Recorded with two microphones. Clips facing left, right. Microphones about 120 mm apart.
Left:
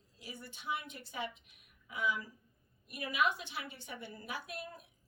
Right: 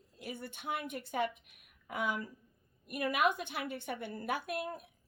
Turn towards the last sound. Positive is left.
turn(degrees=-55)  # may be behind; listen again after turning